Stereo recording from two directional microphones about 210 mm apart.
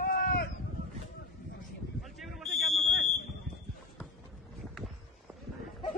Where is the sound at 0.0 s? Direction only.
45° left (ahead or behind).